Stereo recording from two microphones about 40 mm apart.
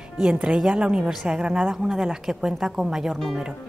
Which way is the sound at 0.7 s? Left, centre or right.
Right.